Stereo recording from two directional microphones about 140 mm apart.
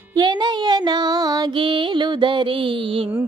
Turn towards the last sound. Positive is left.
turn(degrees=-40)  # may be behind; listen again after turning